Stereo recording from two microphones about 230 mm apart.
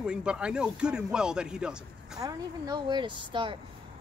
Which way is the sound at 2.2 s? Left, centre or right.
Centre.